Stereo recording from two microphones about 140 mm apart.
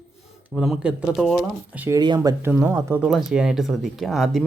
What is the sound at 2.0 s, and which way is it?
Speech, 30° right (ahead or behind).